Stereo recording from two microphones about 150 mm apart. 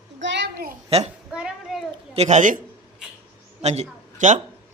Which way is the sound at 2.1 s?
50° right (ahead or behind).